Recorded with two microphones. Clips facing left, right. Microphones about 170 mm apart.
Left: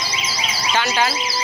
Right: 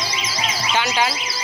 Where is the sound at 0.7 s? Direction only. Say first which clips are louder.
Left 1 dB; 15° right (ahead or behind).